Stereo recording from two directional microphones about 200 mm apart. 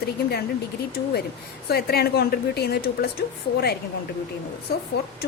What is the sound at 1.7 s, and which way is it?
A woman's voice, 50° left (ahead or behind).